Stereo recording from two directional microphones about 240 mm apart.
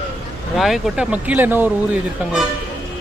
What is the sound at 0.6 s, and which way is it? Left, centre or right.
Speech, centre.